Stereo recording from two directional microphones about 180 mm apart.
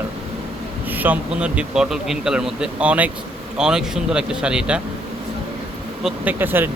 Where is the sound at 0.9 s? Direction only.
10° right (ahead or behind).